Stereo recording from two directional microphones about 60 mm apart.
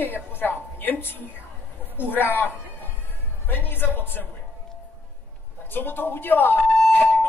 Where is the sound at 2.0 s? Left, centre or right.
Left.